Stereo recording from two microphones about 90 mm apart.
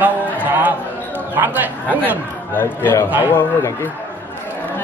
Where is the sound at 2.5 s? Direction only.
20° left (ahead or behind).